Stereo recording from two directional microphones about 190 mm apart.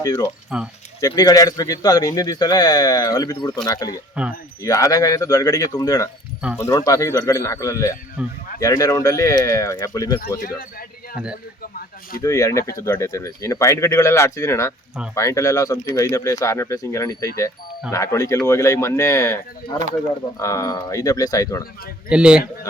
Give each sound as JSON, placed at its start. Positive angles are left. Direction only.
{"t": 0.0, "sound": "speech", "side_deg": 15}
{"t": 0.5, "sound": "speech", "side_deg": -5}
{"t": 1.0, "sound": "speech", "side_deg": 20}
{"t": 4.1, "sound": "speech", "side_deg": -5}
{"t": 4.6, "sound": "speech", "side_deg": 15}
{"t": 8.2, "sound": "speech", "side_deg": -5}
{"t": 8.6, "sound": "speech", "side_deg": 20}
{"t": 10.2, "sound": "speech", "side_deg": 45}
{"t": 12.2, "sound": "speech", "side_deg": 15}
{"t": 22.1, "sound": "speech", "side_deg": -5}